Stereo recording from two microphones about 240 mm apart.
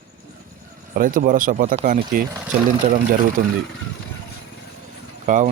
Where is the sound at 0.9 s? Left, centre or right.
Right.